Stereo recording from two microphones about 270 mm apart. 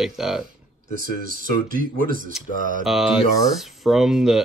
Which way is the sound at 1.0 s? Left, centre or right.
Right.